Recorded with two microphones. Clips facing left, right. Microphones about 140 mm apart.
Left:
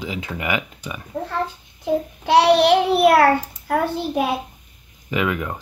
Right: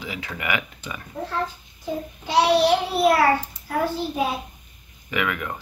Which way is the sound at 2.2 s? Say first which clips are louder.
Left 4 dB; 65° left (ahead or behind).